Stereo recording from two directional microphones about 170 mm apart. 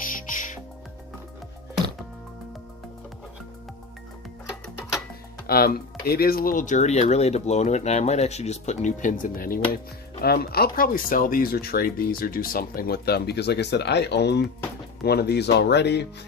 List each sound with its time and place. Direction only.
0.2 s music: 50° left (ahead or behind)
5.5 s speech: 65° left (ahead or behind); by 16.0 s 80° left